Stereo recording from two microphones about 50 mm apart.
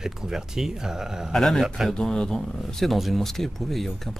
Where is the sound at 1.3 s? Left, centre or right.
Centre.